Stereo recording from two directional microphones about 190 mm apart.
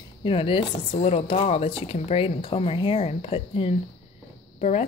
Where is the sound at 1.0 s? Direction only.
35° left (ahead or behind).